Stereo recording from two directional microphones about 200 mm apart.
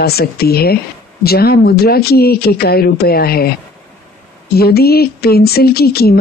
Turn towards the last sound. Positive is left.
turn(degrees=50)  # may be behind; listen again after turning